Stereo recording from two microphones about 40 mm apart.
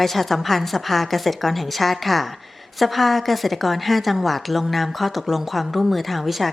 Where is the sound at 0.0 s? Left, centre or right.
Centre.